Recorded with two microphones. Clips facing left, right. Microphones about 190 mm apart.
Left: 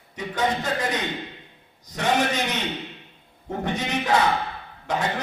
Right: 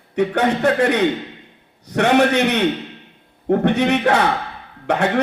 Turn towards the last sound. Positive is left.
turn(degrees=-65)  # may be behind; listen again after turning